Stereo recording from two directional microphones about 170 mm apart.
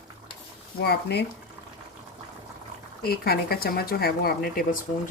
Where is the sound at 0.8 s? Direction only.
75° left (ahead or behind).